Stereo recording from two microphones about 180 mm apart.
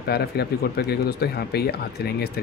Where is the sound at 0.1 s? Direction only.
60° left (ahead or behind).